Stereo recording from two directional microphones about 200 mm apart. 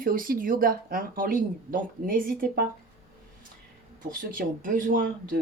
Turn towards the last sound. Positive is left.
turn(degrees=-40)  # may be behind; listen again after turning